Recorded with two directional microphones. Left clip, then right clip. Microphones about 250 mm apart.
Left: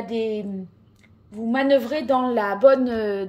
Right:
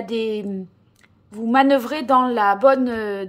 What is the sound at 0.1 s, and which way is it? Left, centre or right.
A woman's voice, centre.